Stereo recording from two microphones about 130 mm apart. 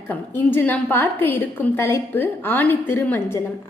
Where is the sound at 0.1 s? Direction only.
15° left (ahead or behind).